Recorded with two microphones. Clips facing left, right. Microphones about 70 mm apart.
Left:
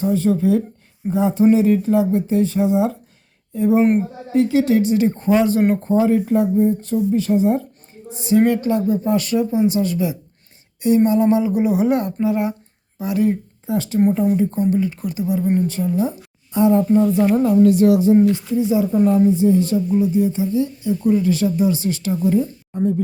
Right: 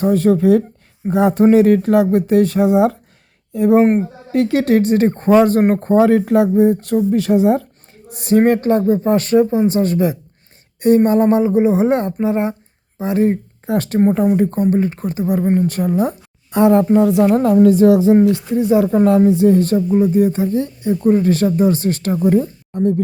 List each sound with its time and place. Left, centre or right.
0.0 s a woman's voice: right
8.1 s a woman's voice: right
13.7 s a woman's voice: right
15.5 s speech: right
17.3 s a woman's voice: right